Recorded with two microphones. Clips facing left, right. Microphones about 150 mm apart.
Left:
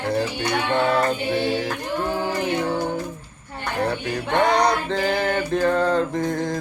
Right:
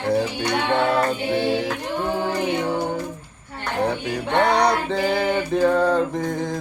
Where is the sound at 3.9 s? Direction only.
10° right (ahead or behind).